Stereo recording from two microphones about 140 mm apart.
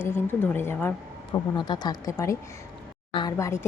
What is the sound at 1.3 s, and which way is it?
Speech, 30° left (ahead or behind).